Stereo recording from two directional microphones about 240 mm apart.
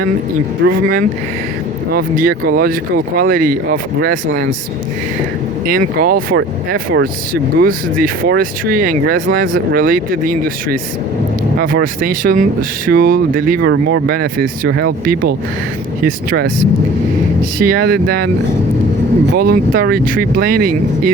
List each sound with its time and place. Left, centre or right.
0.6 s speech: right
5.6 s speech: right
17.6 s speech: right
19.4 s speech: right